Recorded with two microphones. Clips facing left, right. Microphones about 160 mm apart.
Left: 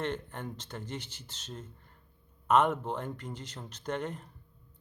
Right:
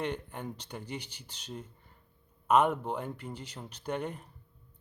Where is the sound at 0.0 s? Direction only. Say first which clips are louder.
Even; 10° right (ahead or behind).